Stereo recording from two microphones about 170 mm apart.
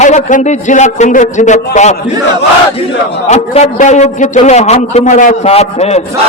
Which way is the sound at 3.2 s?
40° left (ahead or behind).